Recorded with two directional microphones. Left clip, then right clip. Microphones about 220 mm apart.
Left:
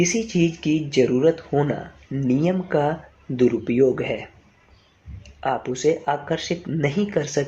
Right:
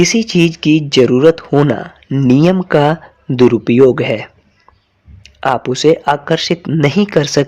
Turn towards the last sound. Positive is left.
turn(degrees=-50)  # may be behind; listen again after turning